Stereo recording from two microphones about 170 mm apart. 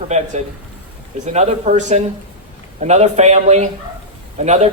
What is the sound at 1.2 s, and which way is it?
Speech, 40° right (ahead or behind).